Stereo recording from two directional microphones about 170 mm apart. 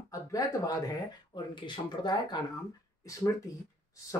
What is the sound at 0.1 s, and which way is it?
Speech, 20° left (ahead or behind).